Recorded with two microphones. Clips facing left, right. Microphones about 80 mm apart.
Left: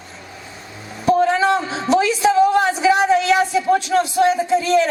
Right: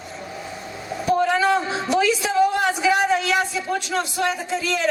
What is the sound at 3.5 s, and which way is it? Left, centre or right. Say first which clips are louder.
A woman's voice: left 8 dB; left.